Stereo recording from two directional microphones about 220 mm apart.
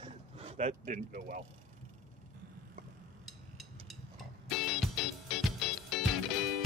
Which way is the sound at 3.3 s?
Centre (ahead or behind).